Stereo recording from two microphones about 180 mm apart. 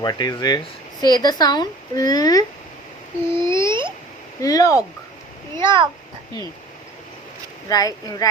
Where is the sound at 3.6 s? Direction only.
25° right (ahead or behind).